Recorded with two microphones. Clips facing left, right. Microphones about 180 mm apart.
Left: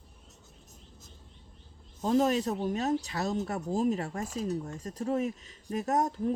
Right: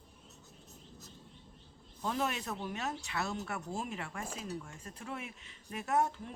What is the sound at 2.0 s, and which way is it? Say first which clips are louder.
Speech: left 10 dB; 40° left (ahead or behind).